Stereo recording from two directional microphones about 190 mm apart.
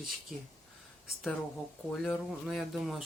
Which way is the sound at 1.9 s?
Centre (ahead or behind).